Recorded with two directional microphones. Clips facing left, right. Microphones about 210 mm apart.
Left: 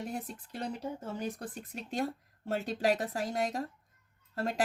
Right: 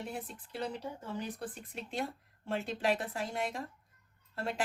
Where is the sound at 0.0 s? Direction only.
40° left (ahead or behind).